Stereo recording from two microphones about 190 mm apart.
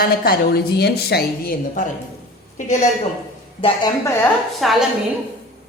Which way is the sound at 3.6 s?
25° left (ahead or behind).